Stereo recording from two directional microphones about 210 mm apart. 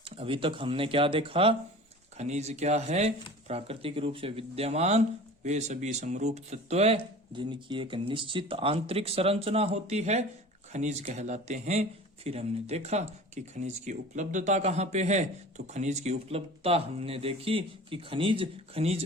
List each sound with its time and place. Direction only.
0.0 s speech: 25° right (ahead or behind)